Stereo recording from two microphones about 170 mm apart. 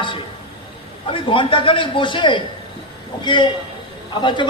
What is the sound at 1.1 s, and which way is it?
A woman's voice, 30° left (ahead or behind).